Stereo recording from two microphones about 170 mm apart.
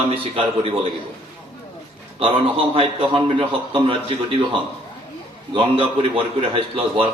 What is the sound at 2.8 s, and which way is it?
A man's voice, 30° right (ahead or behind).